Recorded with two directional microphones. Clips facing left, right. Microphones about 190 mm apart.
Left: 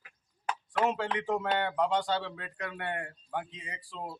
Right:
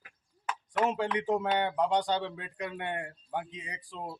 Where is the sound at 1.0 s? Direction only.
15° right (ahead or behind).